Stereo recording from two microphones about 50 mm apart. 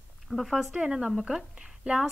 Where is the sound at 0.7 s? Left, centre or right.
Centre.